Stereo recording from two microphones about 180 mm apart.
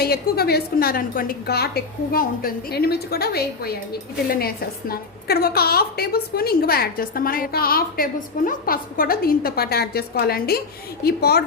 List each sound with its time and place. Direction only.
0.0 s a woman's voice: 60° left (ahead or behind)